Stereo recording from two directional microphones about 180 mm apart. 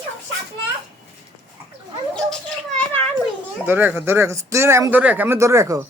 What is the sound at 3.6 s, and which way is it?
Speech, 10° right (ahead or behind).